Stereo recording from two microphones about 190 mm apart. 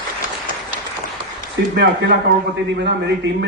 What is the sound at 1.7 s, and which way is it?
A man's voice, 65° right (ahead or behind).